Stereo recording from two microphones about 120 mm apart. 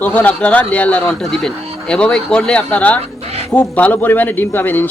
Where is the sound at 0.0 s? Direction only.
15° left (ahead or behind).